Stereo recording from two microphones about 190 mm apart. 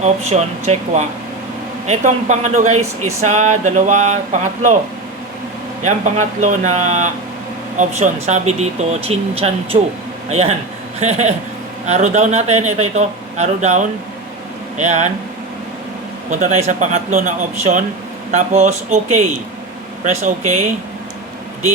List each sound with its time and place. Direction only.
0.0 s speech: 35° right (ahead or behind)
5.8 s speech: 40° right (ahead or behind)
16.3 s speech: 40° right (ahead or behind)